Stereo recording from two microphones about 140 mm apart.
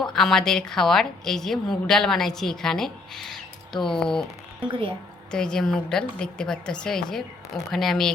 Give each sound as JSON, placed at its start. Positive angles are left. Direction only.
{"t": 0.0, "sound": "a woman's voice", "side_deg": 0}
{"t": 4.7, "sound": "a woman's voice", "side_deg": -40}
{"t": 5.3, "sound": "a woman's voice", "side_deg": 5}